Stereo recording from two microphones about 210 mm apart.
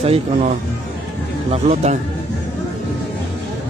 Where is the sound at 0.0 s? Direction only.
30° right (ahead or behind).